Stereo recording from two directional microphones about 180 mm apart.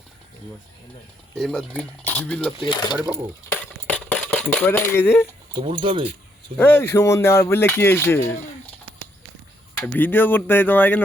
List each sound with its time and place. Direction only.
1.4 s speech: centre (ahead or behind)
2.6 s speech: 25° left (ahead or behind)
3.5 s dishes: 5° left (ahead or behind)
5.5 s speech: 30° right (ahead or behind)
6.6 s speech: 10° left (ahead or behind)
9.8 s speech: 10° left (ahead or behind)